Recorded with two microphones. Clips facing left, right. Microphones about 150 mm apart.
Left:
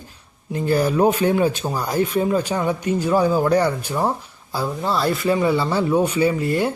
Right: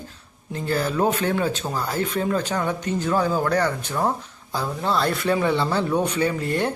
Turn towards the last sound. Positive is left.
turn(degrees=5)  # may be behind; listen again after turning